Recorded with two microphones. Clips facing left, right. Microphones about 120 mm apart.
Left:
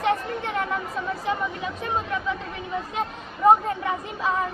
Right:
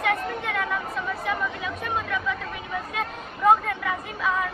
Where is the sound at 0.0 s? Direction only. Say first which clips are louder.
Left 2 dB; 30° left (ahead or behind).